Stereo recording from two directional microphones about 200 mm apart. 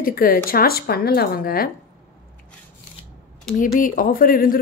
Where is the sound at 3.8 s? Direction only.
45° left (ahead or behind).